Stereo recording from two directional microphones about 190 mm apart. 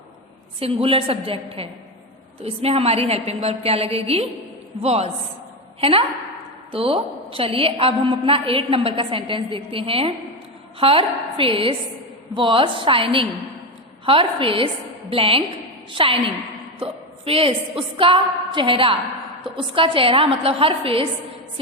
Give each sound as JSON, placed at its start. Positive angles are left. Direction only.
{"t": 0.6, "sound": "a woman's voice", "side_deg": -30}